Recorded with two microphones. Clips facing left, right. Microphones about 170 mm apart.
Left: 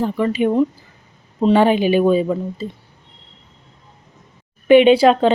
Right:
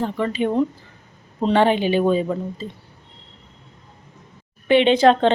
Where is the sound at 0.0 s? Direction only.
10° left (ahead or behind).